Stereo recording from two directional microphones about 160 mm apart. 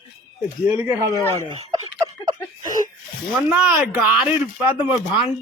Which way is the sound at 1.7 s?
20° right (ahead or behind).